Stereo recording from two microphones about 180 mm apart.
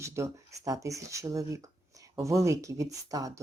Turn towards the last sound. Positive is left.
turn(degrees=-20)  # may be behind; listen again after turning